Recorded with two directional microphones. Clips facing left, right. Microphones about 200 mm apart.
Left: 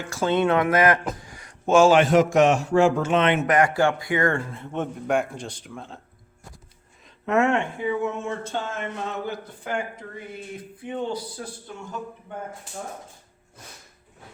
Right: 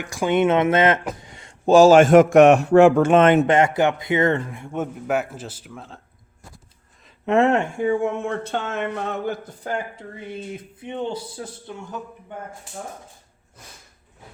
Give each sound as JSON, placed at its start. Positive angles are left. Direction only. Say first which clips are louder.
{"t": 0.0, "sound": "speech", "louder": "right 3 dB", "side_deg": -15}
{"t": 3.4, "sound": "a man's voice", "louder": "right 2 dB", "side_deg": -25}
{"t": 7.3, "sound": "speech", "louder": "right 3 dB", "side_deg": -35}
{"t": 9.6, "sound": "speech", "louder": "right 1 dB", "side_deg": -35}